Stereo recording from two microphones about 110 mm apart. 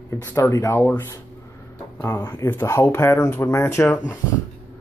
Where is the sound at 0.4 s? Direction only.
30° left (ahead or behind).